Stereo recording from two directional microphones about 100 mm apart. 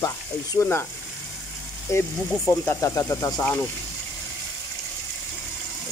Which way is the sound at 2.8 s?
30° left (ahead or behind).